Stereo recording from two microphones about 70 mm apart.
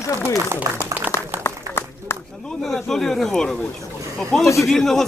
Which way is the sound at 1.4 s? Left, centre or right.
Left.